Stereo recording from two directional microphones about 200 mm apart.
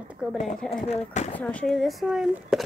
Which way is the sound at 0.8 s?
35° left (ahead or behind).